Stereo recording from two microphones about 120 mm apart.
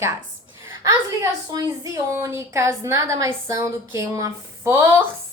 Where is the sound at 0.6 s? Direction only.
25° right (ahead or behind).